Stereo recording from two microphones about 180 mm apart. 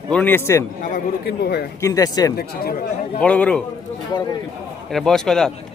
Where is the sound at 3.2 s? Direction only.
5° left (ahead or behind).